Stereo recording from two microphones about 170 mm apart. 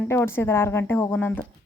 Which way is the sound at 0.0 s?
15° left (ahead or behind).